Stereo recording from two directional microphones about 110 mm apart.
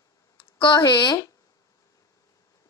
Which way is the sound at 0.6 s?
45° left (ahead or behind).